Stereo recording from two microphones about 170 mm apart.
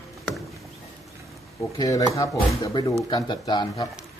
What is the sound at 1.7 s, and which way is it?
Speech, 20° left (ahead or behind).